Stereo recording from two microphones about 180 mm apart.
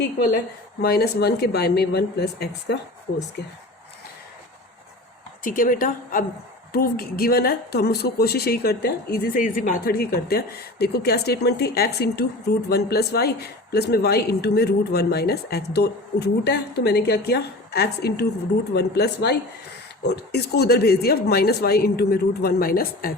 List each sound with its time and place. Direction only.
0.8 s a man's voice: 60° left (ahead or behind)
3.1 s a woman's voice: 55° left (ahead or behind)
5.4 s a woman's voice: 50° left (ahead or behind); by 9.3 s 65° left (ahead or behind)
9.3 s a man's voice: 45° left (ahead or behind)